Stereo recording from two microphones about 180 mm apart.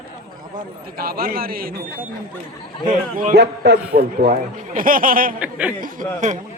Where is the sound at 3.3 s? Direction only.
70° right (ahead or behind).